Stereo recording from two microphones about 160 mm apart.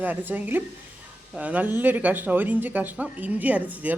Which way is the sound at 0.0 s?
10° right (ahead or behind).